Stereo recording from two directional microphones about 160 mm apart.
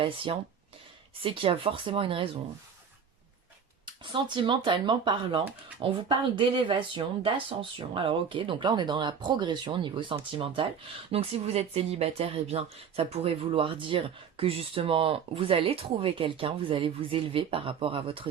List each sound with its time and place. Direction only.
0.3 s speech: 35° right (ahead or behind)
3.8 s speech: 30° right (ahead or behind)